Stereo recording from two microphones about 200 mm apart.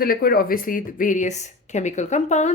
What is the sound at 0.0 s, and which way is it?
A woman's voice, 50° left (ahead or behind).